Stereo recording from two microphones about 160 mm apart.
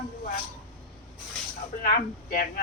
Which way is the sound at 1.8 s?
60° left (ahead or behind).